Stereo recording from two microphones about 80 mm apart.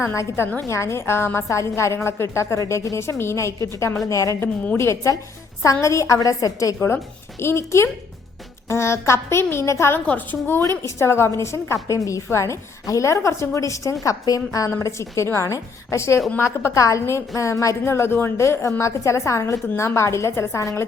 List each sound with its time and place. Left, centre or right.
0.0 s a woman's voice: left
4.4 s a woman's voice: centre
4.8 s a woman's voice: left
6.7 s a woman's voice: left
10.1 s a woman's voice: left
10.6 s a woman's voice: left